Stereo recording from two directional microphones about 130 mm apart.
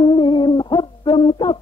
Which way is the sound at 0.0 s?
35° left (ahead or behind).